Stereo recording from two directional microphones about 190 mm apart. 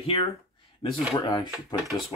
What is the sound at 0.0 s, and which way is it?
Speech, 30° left (ahead or behind).